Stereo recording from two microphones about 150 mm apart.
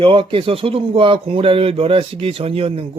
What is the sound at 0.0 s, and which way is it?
Speech, 35° right (ahead or behind).